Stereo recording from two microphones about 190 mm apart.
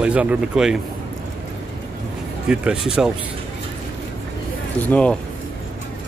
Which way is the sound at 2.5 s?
5° right (ahead or behind).